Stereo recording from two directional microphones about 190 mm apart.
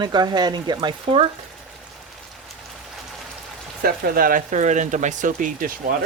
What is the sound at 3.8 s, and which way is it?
Speech, 50° right (ahead or behind).